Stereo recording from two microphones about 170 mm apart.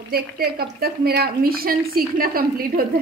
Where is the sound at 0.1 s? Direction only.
65° right (ahead or behind).